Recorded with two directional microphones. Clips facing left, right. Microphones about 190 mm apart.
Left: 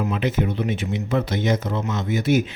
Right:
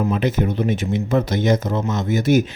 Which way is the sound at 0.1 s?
40° right (ahead or behind).